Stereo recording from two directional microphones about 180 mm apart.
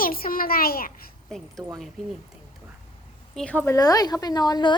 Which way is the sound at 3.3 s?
10° left (ahead or behind).